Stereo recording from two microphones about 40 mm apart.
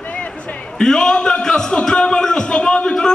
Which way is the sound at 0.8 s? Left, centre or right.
Centre.